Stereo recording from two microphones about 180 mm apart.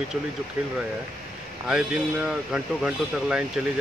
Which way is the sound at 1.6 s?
5° right (ahead or behind).